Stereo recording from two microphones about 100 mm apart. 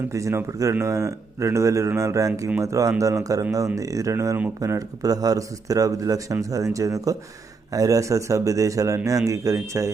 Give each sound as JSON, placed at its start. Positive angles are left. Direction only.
{"t": 0.1, "sound": "speech", "side_deg": -30}